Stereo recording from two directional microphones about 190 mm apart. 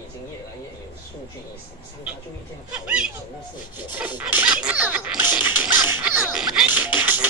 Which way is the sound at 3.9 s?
10° right (ahead or behind).